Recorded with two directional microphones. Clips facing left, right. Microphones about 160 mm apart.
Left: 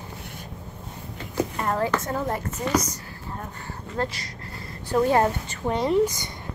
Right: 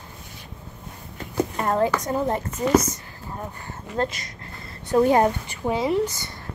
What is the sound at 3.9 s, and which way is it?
Speech, 20° right (ahead or behind).